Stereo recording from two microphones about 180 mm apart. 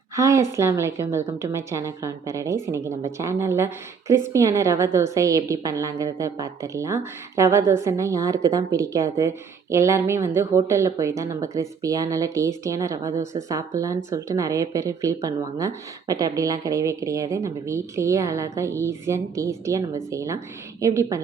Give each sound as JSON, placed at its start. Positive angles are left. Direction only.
{"t": 0.2, "sound": "a woman's voice", "side_deg": -15}